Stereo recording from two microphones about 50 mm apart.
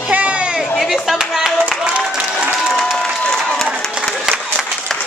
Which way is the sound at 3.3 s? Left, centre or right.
Centre.